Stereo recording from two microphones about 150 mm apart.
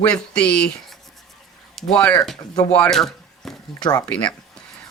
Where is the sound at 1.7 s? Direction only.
5° left (ahead or behind).